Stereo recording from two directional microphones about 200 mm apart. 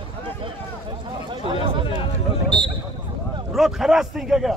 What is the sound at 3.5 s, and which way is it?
A man's voice, centre (ahead or behind).